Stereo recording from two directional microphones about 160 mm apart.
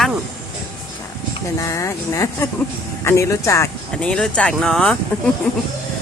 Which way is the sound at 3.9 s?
5° left (ahead or behind).